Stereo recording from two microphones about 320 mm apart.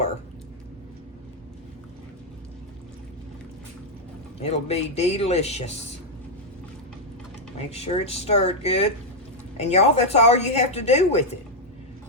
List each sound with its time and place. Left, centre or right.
4.4 s a woman's voice: centre
7.7 s a woman's voice: centre